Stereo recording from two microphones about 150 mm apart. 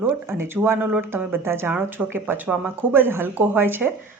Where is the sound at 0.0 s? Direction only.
15° right (ahead or behind).